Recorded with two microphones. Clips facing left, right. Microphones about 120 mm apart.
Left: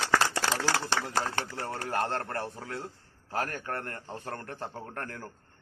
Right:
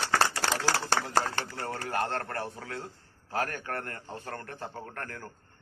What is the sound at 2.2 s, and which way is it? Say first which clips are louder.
A man's voice: even; 30° left (ahead or behind).